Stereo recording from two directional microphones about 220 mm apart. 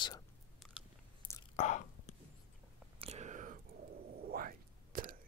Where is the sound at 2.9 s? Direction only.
30° right (ahead or behind).